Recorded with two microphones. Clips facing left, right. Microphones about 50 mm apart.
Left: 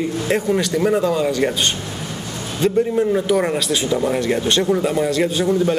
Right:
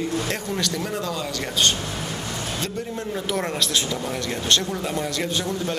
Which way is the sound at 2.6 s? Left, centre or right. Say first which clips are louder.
Left 12 dB; centre.